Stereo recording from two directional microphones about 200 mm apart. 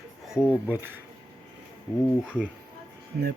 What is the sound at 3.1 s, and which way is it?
Speech, 50° right (ahead or behind).